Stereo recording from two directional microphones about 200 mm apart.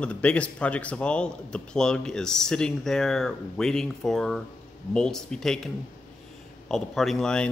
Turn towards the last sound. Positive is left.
turn(degrees=5)  # may be behind; listen again after turning